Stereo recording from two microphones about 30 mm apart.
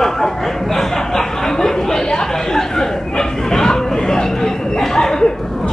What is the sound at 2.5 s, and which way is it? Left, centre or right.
Chatter, centre.